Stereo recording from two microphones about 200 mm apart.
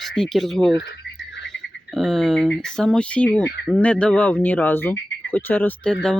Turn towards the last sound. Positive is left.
turn(degrees=10)  # may be behind; listen again after turning